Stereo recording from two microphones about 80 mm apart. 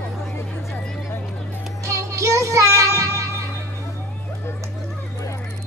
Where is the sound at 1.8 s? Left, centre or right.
Right.